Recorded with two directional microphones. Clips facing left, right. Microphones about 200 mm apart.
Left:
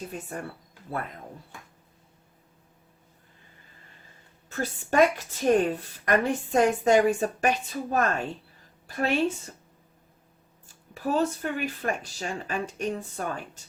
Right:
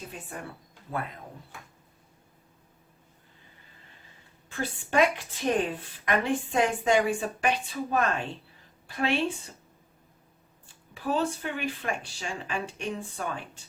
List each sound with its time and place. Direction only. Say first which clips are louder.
4.4 s a woman's voice: left 2 dB; 45° left (ahead or behind)
10.7 s a woman's voice: left 2 dB; 45° left (ahead or behind)